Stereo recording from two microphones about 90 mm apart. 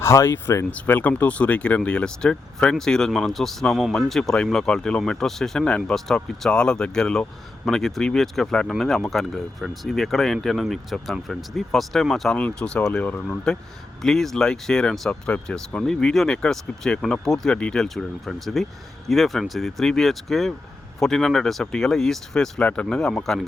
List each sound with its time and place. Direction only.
0.0 s speech: 30° left (ahead or behind)
0.7 s speech: 15° left (ahead or behind)
14.0 s speech: 5° left (ahead or behind)